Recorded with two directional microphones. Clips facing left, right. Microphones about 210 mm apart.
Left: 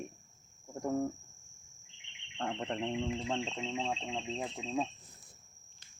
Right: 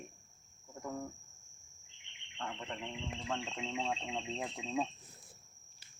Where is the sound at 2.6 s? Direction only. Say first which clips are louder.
Left 8 dB; 40° left (ahead or behind).